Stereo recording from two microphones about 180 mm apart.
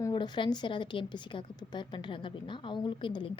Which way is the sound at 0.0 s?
25° left (ahead or behind).